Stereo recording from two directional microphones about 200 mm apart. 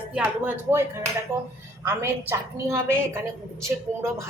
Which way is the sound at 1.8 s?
15° right (ahead or behind).